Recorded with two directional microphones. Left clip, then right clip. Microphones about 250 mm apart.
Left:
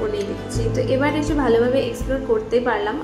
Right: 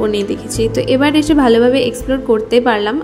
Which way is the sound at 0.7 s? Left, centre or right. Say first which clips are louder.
Right 6 dB; right.